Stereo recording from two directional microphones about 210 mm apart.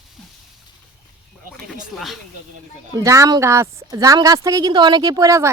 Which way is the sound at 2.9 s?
15° right (ahead or behind).